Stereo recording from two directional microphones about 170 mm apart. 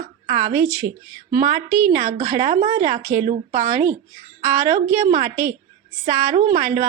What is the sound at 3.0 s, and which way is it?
Speech, 15° right (ahead or behind).